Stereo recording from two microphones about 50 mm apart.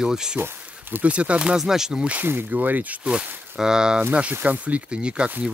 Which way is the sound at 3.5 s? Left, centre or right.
Centre.